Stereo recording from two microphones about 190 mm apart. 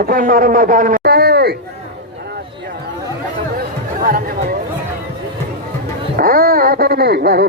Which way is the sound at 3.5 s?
50° right (ahead or behind).